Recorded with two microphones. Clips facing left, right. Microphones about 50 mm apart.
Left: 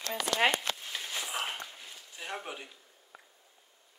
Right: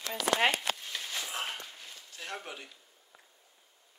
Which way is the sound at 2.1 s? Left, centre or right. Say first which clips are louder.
Left 2 dB; centre.